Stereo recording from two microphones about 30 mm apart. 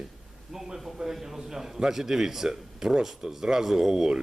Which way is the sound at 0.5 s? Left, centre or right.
Centre.